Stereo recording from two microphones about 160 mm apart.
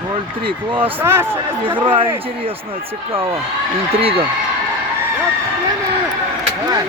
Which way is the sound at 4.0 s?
35° right (ahead or behind).